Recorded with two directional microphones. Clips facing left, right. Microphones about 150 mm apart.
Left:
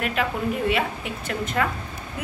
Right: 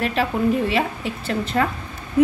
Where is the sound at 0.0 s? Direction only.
30° right (ahead or behind).